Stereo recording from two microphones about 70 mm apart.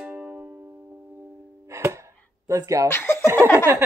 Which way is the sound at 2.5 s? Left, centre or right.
Right.